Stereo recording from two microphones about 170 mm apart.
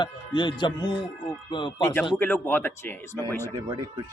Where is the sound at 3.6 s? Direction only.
25° right (ahead or behind).